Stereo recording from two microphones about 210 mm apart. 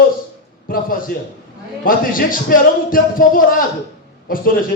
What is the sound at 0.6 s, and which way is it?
Speech, 40° left (ahead or behind).